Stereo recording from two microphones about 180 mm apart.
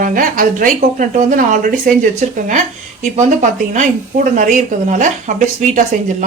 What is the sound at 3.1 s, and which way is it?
Speech, 40° right (ahead or behind).